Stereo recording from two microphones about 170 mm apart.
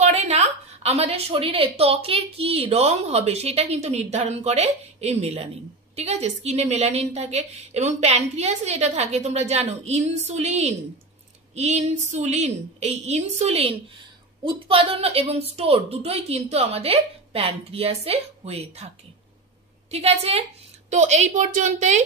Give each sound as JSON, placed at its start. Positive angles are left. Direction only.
{"t": 0.0, "sound": "a woman's voice", "side_deg": -40}
{"t": 19.9, "sound": "a woman's voice", "side_deg": -40}